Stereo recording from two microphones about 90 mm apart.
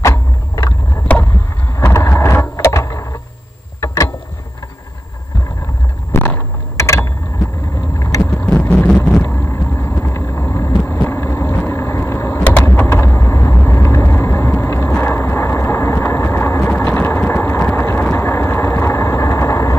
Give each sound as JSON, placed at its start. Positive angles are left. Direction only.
{"t": 0.0, "sound": "vehicle", "side_deg": 35}
{"t": 1.1, "sound": "a sound", "side_deg": 15}
{"t": 1.9, "sound": "vehicle", "side_deg": 30}
{"t": 3.8, "sound": "boat", "side_deg": 35}
{"t": 6.1, "sound": "vehicle", "side_deg": 25}
{"t": 7.9, "sound": "boat", "side_deg": 35}
{"t": 8.3, "sound": "a sound", "side_deg": 20}
{"t": 9.2, "sound": "vehicle", "side_deg": 25}